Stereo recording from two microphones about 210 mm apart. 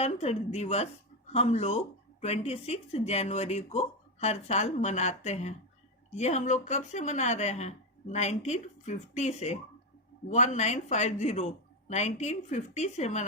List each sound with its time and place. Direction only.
0.0 s a woman's voice: 30° left (ahead or behind)